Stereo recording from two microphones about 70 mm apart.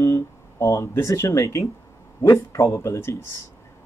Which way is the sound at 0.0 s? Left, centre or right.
Left.